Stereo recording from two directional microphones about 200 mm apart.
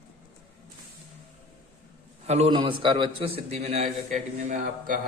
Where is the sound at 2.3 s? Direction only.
30° right (ahead or behind).